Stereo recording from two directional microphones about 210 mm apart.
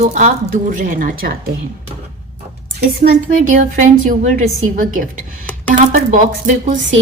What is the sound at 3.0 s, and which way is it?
A woman's voice, 40° right (ahead or behind).